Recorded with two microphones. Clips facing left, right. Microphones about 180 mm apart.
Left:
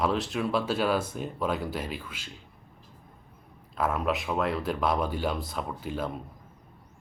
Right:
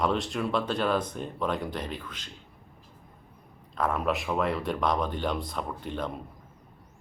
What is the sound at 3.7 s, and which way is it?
Speech, 5° left (ahead or behind).